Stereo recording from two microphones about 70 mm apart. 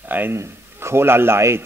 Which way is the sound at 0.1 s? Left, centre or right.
Right.